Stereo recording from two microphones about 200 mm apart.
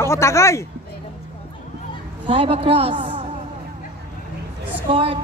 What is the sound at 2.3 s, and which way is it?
Speech, 25° right (ahead or behind).